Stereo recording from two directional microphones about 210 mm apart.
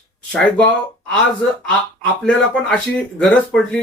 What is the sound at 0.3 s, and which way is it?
Speech, 5° left (ahead or behind).